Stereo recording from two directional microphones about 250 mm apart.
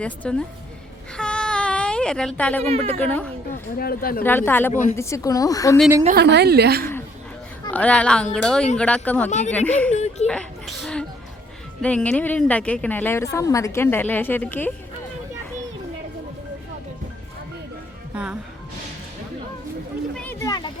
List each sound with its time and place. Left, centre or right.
0.0 s a woman's voice: centre
1.1 s baby cry: centre
2.6 s a woman's voice: right
3.8 s speech: left
4.2 s a woman's voice: centre
6.1 s a woman's voice: right
7.6 s a woman's voice: centre
9.9 s speech: left
10.2 s a sound: centre
11.8 s a woman's voice: centre
18.1 s speech: centre
20.1 s a sound: centre